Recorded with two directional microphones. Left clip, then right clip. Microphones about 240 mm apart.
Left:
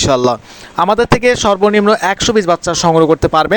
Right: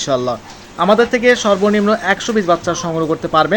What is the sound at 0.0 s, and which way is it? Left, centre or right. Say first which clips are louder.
Speech: left 5 dB; left.